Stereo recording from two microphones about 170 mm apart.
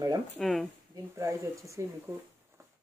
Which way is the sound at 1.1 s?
20° right (ahead or behind).